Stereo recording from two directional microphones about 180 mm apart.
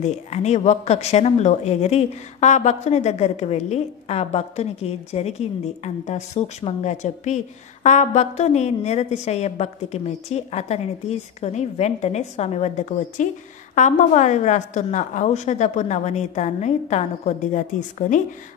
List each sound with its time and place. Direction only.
0.0 s speech: 40° left (ahead or behind)